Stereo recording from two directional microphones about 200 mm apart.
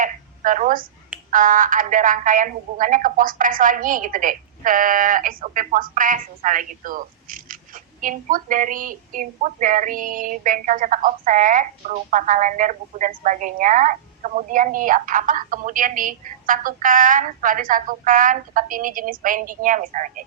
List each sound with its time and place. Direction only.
0.0 s telephone: 40° right (ahead or behind)
1.3 s speech: 40° right (ahead or behind)